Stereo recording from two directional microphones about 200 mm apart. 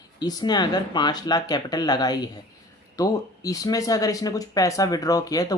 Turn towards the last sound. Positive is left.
turn(degrees=20)  # may be behind; listen again after turning